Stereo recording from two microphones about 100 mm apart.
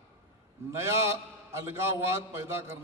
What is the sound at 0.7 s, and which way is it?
A man's voice, 25° right (ahead or behind).